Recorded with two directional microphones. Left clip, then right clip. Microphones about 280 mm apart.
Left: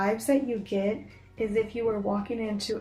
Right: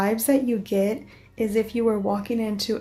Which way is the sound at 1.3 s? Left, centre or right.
Right.